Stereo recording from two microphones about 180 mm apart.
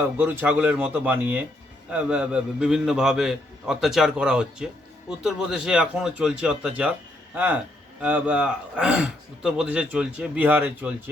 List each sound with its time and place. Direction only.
0.2 s a man's voice: 10° right (ahead or behind)